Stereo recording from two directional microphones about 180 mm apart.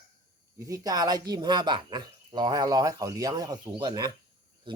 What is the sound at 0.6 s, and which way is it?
Speech, 20° right (ahead or behind).